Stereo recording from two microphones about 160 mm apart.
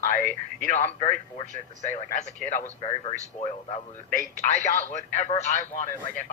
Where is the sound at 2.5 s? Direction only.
40° left (ahead or behind).